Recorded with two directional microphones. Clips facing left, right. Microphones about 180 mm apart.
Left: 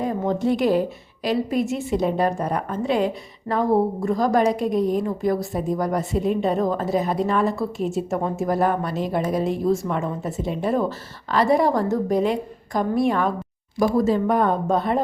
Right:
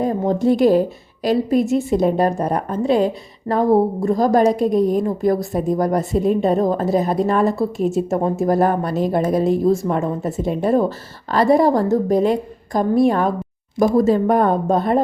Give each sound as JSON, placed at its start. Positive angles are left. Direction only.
{"t": 0.0, "sound": "a woman's voice", "side_deg": -35}